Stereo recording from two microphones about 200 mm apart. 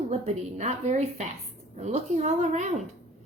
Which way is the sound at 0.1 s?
35° right (ahead or behind).